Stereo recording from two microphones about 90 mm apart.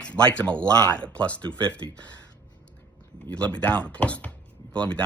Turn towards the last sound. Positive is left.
turn(degrees=10)  # may be behind; listen again after turning